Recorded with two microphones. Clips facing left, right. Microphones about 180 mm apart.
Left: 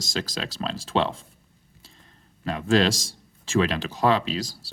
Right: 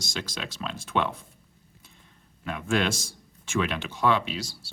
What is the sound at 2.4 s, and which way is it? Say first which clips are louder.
Speech: left 5 dB; 35° left (ahead or behind).